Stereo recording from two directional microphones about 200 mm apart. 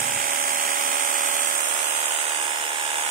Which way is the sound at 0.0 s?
40° right (ahead or behind).